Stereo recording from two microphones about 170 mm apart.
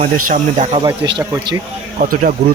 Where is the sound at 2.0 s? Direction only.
50° right (ahead or behind).